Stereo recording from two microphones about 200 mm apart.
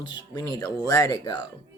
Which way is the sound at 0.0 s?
20° left (ahead or behind).